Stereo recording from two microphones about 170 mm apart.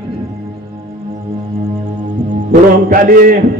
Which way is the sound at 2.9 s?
55° right (ahead or behind).